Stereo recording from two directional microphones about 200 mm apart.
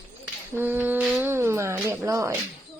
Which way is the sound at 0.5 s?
10° right (ahead or behind).